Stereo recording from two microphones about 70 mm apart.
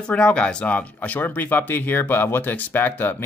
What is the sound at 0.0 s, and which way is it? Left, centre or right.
Speech, centre.